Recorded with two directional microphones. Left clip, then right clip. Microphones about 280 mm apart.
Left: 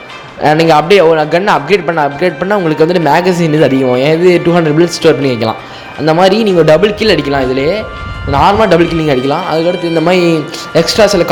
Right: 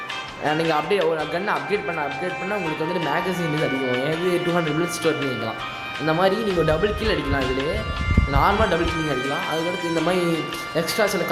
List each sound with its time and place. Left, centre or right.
0.4 s a man's voice: left